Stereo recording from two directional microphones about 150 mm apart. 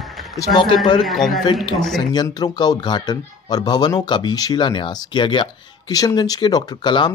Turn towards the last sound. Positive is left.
turn(degrees=30)  # may be behind; listen again after turning